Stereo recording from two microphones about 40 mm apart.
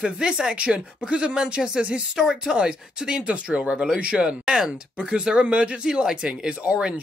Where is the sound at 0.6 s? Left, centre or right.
Right.